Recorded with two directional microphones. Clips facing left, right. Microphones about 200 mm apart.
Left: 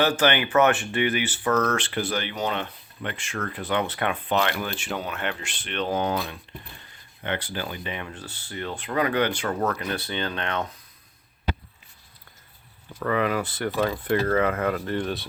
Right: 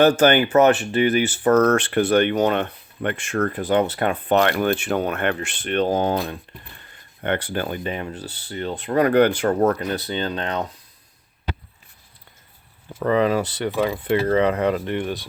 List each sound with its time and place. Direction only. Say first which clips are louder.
0.0 s speech: right 7 dB; 45° right (ahead or behind)
7.2 s speech: right 6 dB; 50° right (ahead or behind)
9.5 s speech: right 7 dB; 35° right (ahead or behind)
12.9 s speech: right 5 dB; 25° right (ahead or behind)
13.6 s speech: right 3 dB; 10° right (ahead or behind)
13.9 s speech: right 3 dB; 25° right (ahead or behind)